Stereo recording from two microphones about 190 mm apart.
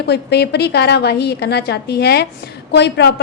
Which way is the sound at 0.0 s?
60° left (ahead or behind).